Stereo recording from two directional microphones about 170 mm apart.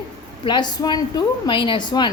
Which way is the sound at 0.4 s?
25° left (ahead or behind).